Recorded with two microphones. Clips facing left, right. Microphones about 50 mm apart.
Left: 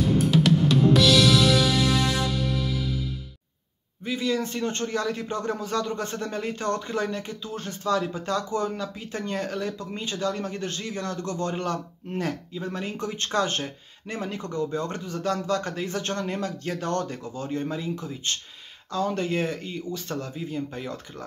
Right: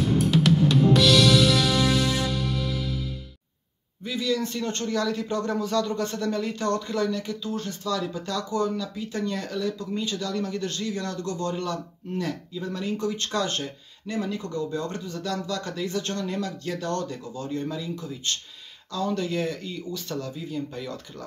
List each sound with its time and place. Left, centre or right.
0.0 s music: centre
4.0 s a man's voice: left